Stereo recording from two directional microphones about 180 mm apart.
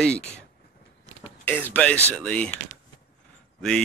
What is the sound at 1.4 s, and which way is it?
Speech, 10° left (ahead or behind).